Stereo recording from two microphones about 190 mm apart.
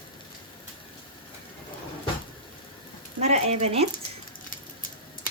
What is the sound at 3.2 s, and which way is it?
Speech, 35° right (ahead or behind).